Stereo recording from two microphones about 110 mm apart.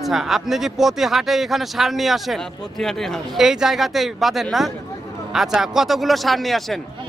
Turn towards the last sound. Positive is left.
turn(degrees=0)  # may be behind; listen again after turning